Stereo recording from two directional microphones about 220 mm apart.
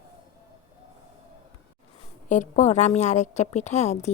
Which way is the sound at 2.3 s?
35° left (ahead or behind).